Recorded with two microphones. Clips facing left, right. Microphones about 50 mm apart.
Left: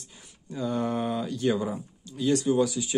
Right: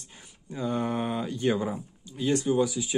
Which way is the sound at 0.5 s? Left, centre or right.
Right.